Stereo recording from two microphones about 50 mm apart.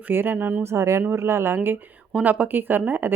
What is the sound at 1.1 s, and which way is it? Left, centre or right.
Speech, right.